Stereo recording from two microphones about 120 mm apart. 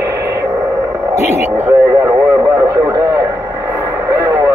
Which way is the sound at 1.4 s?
20° right (ahead or behind).